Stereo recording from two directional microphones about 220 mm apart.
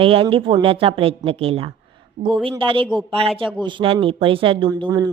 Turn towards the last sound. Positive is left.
turn(degrees=-15)  # may be behind; listen again after turning